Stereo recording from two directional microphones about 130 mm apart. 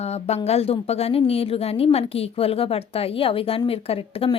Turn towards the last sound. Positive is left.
turn(degrees=45)  # may be behind; listen again after turning